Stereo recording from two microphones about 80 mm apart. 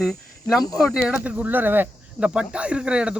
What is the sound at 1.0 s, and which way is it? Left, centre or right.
Speech, centre.